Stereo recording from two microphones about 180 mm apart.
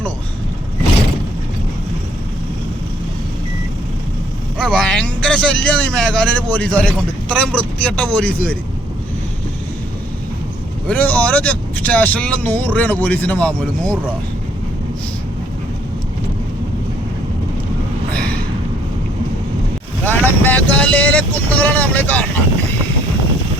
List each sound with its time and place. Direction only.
4.5 s a man's voice: 5° left (ahead or behind)
10.8 s speech: 10° left (ahead or behind)
18.2 s a sound: 55° right (ahead or behind)
20.1 s speech: 10° left (ahead or behind)